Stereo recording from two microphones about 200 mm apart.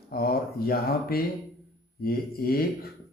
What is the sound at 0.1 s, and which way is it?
A man's voice, 50° left (ahead or behind).